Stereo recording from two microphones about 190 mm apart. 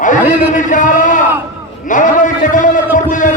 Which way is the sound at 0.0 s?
40° left (ahead or behind).